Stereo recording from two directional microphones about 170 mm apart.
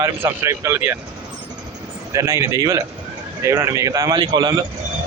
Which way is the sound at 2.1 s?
15° right (ahead or behind).